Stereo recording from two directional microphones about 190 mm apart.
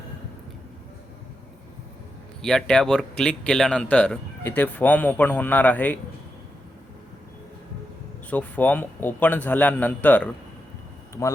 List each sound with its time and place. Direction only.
2.4 s speech: 5° left (ahead or behind)
8.3 s speech: 10° left (ahead or behind)